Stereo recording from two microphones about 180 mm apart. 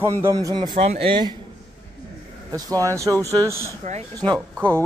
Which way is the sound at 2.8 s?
15° right (ahead or behind).